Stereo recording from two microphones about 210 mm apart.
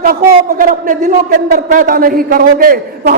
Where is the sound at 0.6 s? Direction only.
40° right (ahead or behind).